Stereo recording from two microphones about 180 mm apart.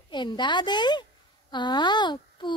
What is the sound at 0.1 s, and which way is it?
A woman's voice, 25° left (ahead or behind).